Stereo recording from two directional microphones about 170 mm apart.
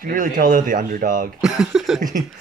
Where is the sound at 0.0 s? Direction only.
55° right (ahead or behind).